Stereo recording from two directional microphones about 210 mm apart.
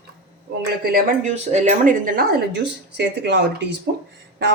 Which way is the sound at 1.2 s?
35° right (ahead or behind).